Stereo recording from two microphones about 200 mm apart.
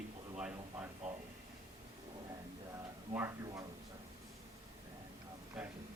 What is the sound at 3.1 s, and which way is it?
Speech, 15° right (ahead or behind).